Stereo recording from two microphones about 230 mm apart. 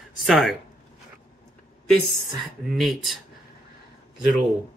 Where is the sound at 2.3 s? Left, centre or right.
Centre.